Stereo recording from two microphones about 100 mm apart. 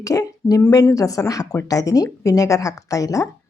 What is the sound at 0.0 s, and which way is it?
Speech, 35° left (ahead or behind).